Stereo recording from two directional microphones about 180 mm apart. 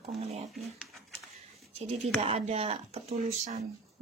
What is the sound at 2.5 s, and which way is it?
A woman's voice, 35° right (ahead or behind).